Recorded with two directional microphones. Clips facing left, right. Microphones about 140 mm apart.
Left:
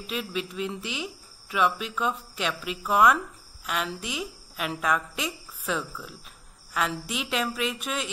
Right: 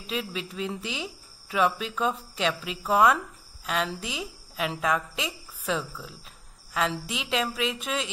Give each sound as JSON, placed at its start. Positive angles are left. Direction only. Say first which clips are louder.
{"t": 0.0, "sound": "a woman's voice", "louder": "left 1 dB", "side_deg": -30}